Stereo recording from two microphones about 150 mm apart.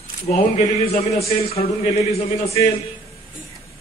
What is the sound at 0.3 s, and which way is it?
A man's voice, 50° left (ahead or behind).